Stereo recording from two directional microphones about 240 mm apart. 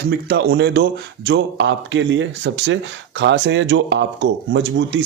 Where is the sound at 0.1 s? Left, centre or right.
Right.